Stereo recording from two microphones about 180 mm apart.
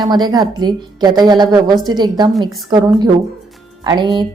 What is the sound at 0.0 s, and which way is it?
A woman's voice, 20° right (ahead or behind).